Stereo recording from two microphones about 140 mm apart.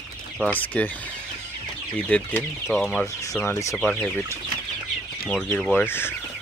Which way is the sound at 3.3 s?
20° left (ahead or behind).